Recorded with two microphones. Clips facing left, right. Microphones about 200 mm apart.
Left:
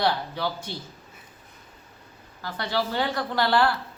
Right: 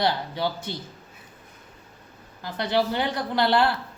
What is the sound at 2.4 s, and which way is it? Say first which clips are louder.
A woman's voice: right 4 dB; 20° right (ahead or behind).